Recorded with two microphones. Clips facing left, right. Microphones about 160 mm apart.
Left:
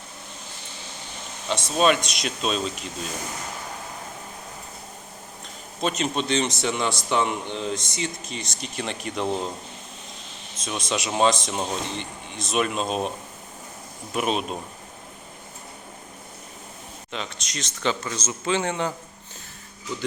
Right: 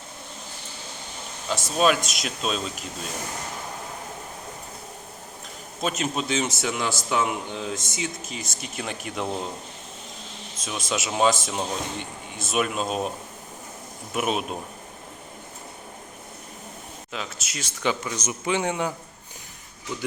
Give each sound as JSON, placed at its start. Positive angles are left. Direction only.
{"t": 1.5, "sound": "a man's voice", "side_deg": 0}
{"t": 5.8, "sound": "a man's voice", "side_deg": -5}
{"t": 10.6, "sound": "a man's voice", "side_deg": 0}
{"t": 14.1, "sound": "a man's voice", "side_deg": -5}
{"t": 17.1, "sound": "a man's voice", "side_deg": -5}